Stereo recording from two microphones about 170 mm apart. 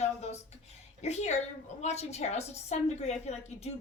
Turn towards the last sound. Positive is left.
turn(degrees=40)  # may be behind; listen again after turning